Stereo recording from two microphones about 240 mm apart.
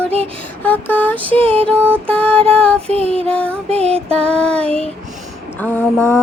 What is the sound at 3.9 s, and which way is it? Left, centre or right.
Music, right.